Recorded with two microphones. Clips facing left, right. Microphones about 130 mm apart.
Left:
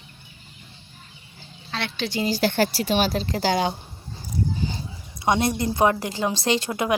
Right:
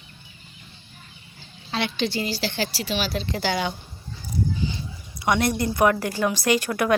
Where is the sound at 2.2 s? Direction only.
50° left (ahead or behind); by 3.7 s 35° left (ahead or behind).